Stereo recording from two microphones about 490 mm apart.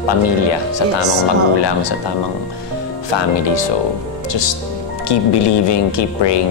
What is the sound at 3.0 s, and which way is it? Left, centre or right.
Speech, left.